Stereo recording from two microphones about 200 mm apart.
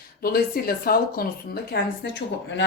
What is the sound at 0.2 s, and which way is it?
A woman's voice, 50° left (ahead or behind).